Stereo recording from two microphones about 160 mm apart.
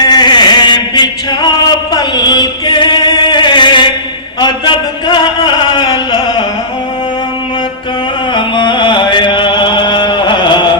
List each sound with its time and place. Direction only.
0.0 s chant: 25° left (ahead or behind)
4.4 s a sound: 30° left (ahead or behind)
8.3 s music: 30° left (ahead or behind)